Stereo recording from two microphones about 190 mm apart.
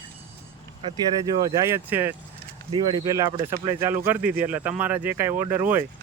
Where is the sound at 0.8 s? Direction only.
30° right (ahead or behind).